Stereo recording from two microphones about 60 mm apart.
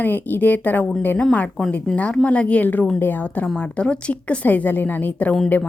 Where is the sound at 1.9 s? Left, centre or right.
Centre; by 3.2 s left.